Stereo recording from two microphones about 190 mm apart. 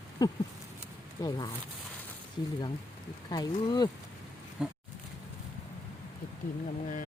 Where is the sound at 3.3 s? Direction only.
20° left (ahead or behind).